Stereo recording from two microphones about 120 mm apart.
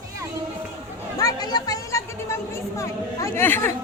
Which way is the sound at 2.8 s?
25° left (ahead or behind).